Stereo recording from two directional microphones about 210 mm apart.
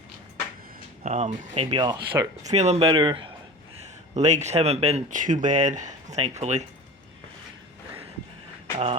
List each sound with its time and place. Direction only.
1.0 s speech: 35° right (ahead or behind); by 2.5 s 20° right (ahead or behind)
2.5 s speech: 30° right (ahead or behind)